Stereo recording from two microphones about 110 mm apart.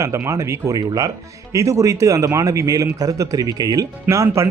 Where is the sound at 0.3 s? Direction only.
25° right (ahead or behind).